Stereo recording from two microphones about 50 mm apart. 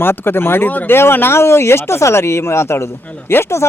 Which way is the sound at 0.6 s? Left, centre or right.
Left.